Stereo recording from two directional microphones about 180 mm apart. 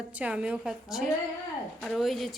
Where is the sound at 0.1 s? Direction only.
5° right (ahead or behind).